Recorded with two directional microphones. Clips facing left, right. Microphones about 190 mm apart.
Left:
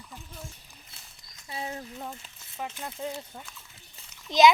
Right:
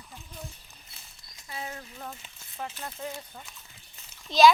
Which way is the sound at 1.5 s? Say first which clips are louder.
Left 3 dB; 25° left (ahead or behind).